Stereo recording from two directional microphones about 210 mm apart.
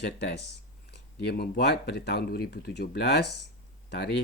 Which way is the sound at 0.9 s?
50° left (ahead or behind).